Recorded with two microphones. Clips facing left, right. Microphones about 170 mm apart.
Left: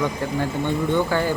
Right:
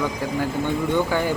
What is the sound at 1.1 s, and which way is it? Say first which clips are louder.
Speech: left 1 dB; 15° right (ahead or behind).